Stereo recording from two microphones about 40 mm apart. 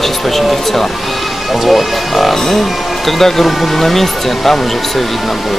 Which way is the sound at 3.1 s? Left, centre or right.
Centre.